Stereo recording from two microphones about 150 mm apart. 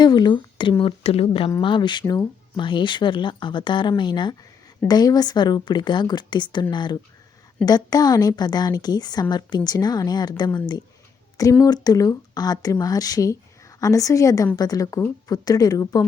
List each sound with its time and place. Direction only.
0.0 s speech: 30° left (ahead or behind)
11.6 s speech: 25° left (ahead or behind)